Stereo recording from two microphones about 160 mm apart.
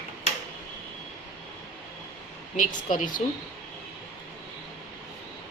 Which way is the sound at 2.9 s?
55° left (ahead or behind).